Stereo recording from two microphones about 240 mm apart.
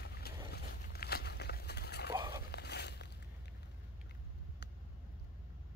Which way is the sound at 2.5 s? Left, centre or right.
Left.